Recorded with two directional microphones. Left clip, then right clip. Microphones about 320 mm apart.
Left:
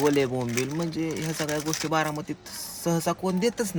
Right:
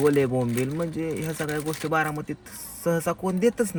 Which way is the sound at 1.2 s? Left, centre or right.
Left.